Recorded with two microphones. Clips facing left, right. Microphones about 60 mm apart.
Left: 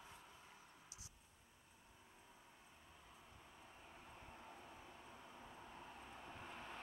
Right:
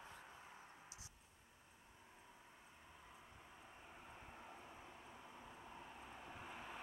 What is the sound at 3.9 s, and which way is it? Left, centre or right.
Vehicle, centre.